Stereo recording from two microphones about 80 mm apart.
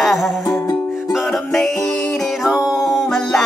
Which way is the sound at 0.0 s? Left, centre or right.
Centre.